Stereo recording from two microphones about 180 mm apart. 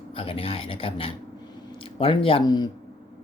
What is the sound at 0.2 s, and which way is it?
Speech, 30° left (ahead or behind).